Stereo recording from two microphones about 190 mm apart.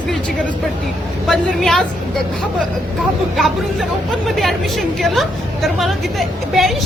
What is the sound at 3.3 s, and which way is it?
A woman's voice, centre (ahead or behind).